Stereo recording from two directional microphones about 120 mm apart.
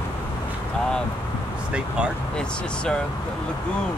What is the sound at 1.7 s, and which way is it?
Speech, 10° right (ahead or behind).